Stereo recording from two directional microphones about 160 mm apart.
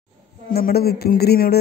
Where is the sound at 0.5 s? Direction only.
75° left (ahead or behind).